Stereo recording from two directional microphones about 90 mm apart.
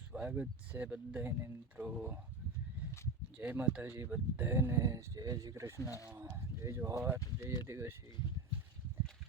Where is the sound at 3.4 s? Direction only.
15° right (ahead or behind).